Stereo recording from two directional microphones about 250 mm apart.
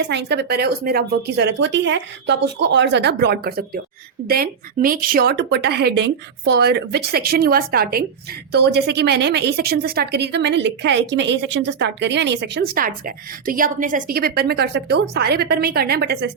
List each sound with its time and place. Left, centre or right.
0.0 s a woman's voice: right